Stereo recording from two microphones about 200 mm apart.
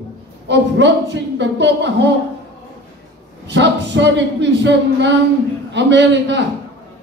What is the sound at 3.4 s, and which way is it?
Speech, 60° right (ahead or behind).